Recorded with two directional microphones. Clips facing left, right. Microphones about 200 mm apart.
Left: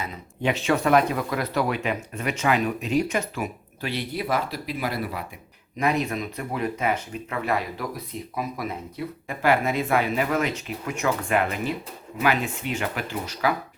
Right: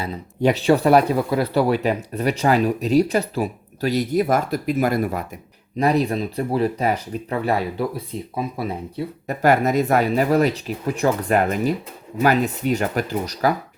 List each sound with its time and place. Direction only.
0.0 s speech: 35° right (ahead or behind)
5.7 s speech: 35° right (ahead or behind)